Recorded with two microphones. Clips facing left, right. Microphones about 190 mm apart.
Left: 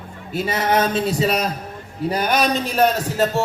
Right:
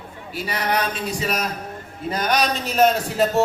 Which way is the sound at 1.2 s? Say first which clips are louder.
Left 3 dB; 35° left (ahead or behind).